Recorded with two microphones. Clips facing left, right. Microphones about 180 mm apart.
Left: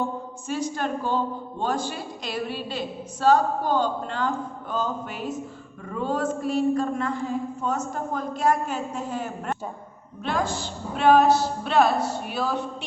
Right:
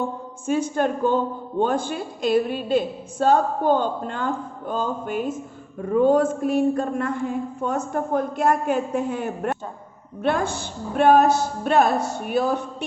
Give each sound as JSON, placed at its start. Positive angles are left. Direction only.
{"t": 0.4, "sound": "a man's voice", "side_deg": -50}
{"t": 10.9, "sound": "a man's voice", "side_deg": -50}